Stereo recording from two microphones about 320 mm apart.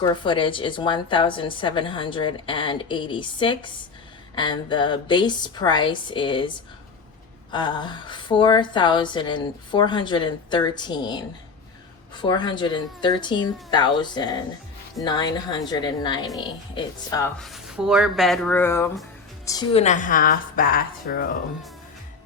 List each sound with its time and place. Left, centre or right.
0.0 s a woman's voice: centre